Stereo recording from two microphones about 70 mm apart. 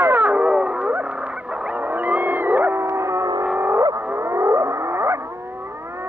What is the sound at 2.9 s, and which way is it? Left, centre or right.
Music, right.